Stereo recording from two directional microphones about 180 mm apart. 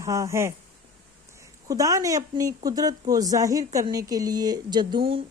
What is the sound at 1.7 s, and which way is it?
A woman's voice, 20° right (ahead or behind).